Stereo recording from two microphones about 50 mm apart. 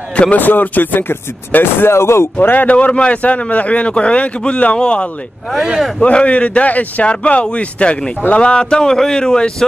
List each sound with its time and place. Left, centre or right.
0.1 s speech: left
0.4 s speech: left
2.4 s speech: left; by 9.7 s centre